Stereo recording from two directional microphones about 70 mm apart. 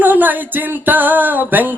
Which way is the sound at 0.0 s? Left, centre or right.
Right.